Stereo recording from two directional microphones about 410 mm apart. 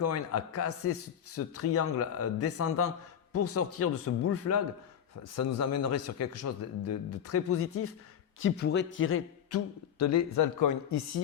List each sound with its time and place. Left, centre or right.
0.0 s a man's voice: left